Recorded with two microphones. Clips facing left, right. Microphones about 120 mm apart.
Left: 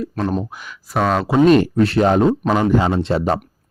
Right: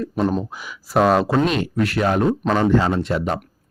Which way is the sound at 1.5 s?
45° left (ahead or behind).